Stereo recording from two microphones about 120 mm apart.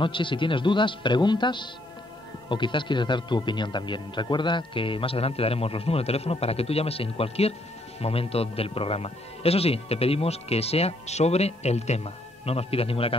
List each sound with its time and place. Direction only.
0.0 s a man's voice: 45° left (ahead or behind)